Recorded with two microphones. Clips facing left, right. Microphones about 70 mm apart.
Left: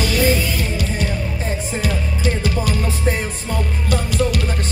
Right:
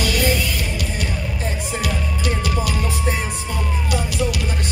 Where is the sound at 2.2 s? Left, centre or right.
Left.